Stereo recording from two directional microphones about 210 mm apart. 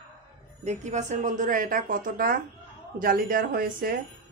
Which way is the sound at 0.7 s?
35° right (ahead or behind).